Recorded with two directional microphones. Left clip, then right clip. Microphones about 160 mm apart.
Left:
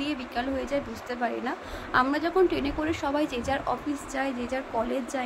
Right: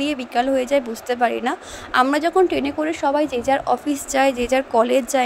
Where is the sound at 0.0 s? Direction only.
50° right (ahead or behind).